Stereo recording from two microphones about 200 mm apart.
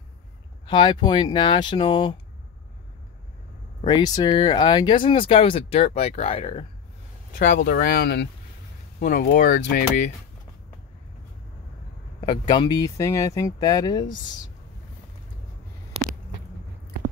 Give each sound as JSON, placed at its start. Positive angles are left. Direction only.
{"t": 0.7, "sound": "speech", "side_deg": 20}
{"t": 3.8, "sound": "speech", "side_deg": 20}
{"t": 7.3, "sound": "speech", "side_deg": 40}
{"t": 12.2, "sound": "speech", "side_deg": 20}
{"t": 16.0, "sound": "a sound", "side_deg": -30}